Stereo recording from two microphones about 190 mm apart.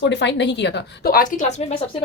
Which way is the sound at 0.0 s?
65° left (ahead or behind).